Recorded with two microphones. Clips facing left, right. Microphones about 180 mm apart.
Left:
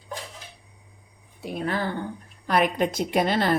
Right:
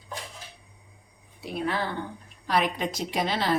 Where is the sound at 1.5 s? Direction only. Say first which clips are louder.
Left 1 dB; 45° left (ahead or behind).